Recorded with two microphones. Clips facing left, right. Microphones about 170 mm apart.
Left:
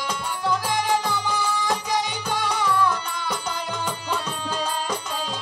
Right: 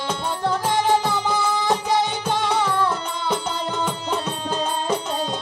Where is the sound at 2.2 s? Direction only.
25° right (ahead or behind).